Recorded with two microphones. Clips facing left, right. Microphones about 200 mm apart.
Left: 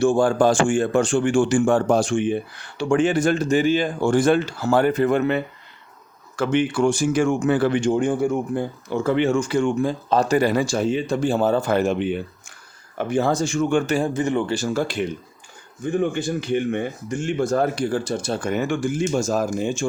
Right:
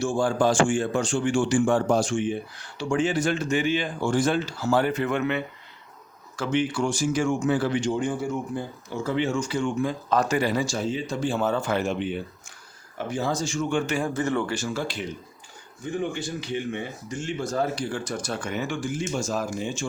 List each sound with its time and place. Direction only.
0.0 s a man's voice: 55° left (ahead or behind); by 4.1 s 40° left (ahead or behind)
4.1 s speech: 55° left (ahead or behind)
4.9 s speech: 40° left (ahead or behind)
6.3 s speech: 55° left (ahead or behind)
9.8 s speech: 30° left (ahead or behind)
10.5 s speech: 60° left (ahead or behind)
11.3 s speech: 35° left (ahead or behind)
11.9 s speech: 60° left (ahead or behind)
14.1 s speech: 15° left (ahead or behind)
14.5 s a man's voice: 40° left (ahead or behind)
17.9 s speech: 30° left (ahead or behind)
18.4 s a man's voice: 50° left (ahead or behind)